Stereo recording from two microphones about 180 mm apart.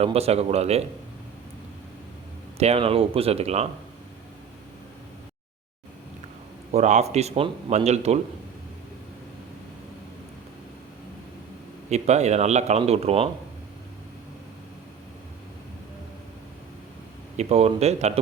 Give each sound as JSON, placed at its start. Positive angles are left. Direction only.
{"t": 0.0, "sound": "speech", "side_deg": -35}
{"t": 2.6, "sound": "speech", "side_deg": -35}
{"t": 6.7, "sound": "speech", "side_deg": -40}
{"t": 11.9, "sound": "speech", "side_deg": -40}
{"t": 17.3, "sound": "speech", "side_deg": -35}